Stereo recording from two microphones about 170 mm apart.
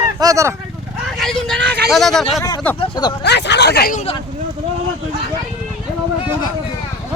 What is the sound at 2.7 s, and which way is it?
Speech, 30° left (ahead or behind).